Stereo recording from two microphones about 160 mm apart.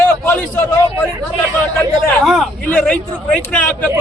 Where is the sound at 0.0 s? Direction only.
10° left (ahead or behind).